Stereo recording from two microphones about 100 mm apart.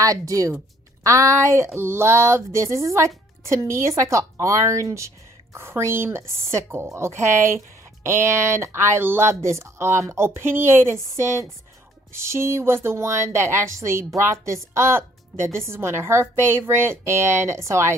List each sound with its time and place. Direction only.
0.0 s speech: 35° right (ahead or behind)